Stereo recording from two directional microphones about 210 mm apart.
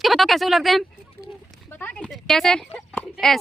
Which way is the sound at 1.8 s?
5° left (ahead or behind).